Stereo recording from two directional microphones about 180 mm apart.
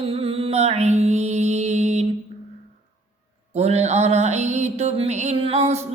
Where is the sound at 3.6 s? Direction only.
35° right (ahead or behind).